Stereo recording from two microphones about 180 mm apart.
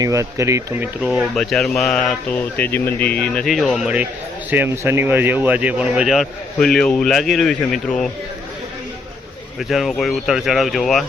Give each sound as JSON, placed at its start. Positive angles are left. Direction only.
{"t": 0.0, "sound": "speech", "side_deg": -15}
{"t": 1.0, "sound": "speech", "side_deg": 0}
{"t": 9.6, "sound": "speech", "side_deg": 0}